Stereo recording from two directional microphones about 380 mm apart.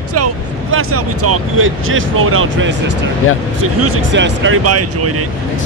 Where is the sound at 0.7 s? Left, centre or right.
Right.